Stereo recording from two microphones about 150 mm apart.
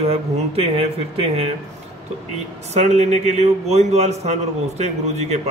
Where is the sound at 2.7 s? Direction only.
50° right (ahead or behind).